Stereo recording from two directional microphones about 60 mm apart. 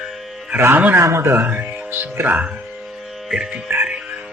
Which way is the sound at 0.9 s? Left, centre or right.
Right.